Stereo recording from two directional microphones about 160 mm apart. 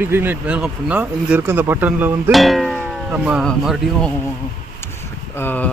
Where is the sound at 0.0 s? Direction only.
15° right (ahead or behind).